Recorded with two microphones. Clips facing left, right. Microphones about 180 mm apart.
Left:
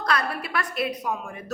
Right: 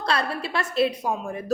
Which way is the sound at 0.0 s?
30° right (ahead or behind).